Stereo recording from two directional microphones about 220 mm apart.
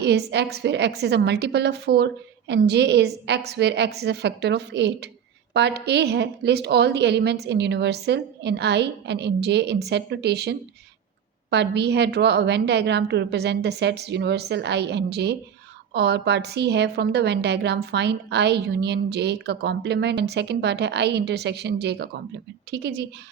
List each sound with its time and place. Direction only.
0.0 s a woman's voice: 50° right (ahead or behind)